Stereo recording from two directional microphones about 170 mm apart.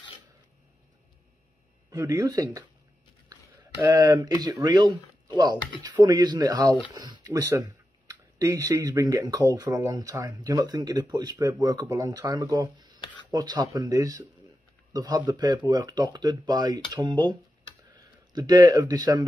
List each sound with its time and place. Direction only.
1.9 s speech: 20° right (ahead or behind)
3.9 s speech: 25° right (ahead or behind)